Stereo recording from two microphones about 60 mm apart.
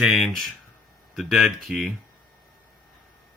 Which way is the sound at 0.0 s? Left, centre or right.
Centre.